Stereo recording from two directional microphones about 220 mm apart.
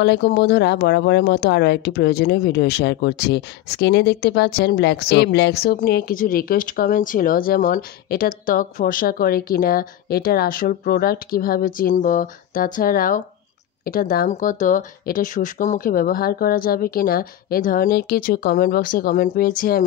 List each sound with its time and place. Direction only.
0.0 s speech: 50° left (ahead or behind)